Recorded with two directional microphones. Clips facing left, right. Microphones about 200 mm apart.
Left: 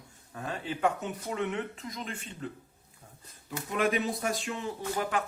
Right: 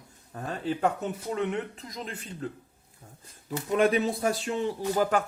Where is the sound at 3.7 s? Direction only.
35° right (ahead or behind).